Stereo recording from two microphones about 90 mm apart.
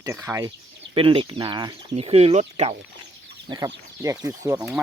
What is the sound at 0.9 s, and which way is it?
Speech, 85° right.